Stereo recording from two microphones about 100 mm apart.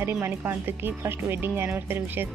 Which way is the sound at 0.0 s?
25° right (ahead or behind).